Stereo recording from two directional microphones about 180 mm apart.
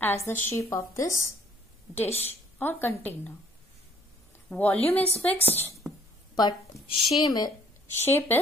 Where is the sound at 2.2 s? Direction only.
10° left (ahead or behind).